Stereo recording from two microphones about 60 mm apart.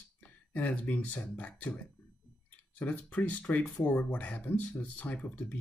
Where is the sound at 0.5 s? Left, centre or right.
Left.